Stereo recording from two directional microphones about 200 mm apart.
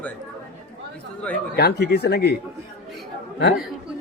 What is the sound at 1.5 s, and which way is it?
Speech, 55° left (ahead or behind).